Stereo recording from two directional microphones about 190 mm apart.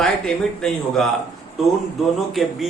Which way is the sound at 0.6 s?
5° left (ahead or behind).